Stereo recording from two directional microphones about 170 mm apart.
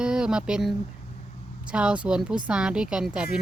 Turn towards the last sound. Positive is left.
turn(degrees=-5)  # may be behind; listen again after turning